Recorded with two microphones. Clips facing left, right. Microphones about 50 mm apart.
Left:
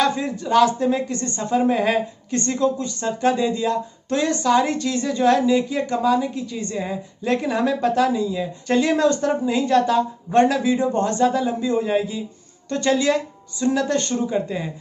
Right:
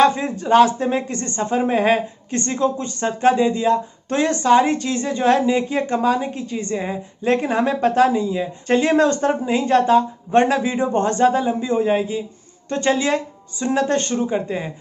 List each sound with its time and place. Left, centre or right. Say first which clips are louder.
0.0 s speech: right 5 dB; right